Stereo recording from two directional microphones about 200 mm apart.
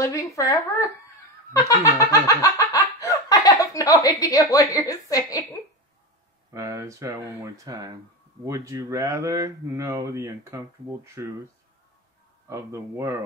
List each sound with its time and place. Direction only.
0.0 s speech: 15° left (ahead or behind)
1.5 s a sound: 15° left (ahead or behind)
6.5 s speech: 15° right (ahead or behind)
12.4 s speech: 15° right (ahead or behind)